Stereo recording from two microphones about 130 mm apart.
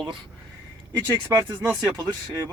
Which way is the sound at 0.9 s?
25° right (ahead or behind).